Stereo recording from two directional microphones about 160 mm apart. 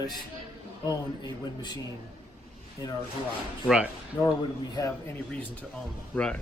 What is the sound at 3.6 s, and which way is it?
Speech, 5° right (ahead or behind).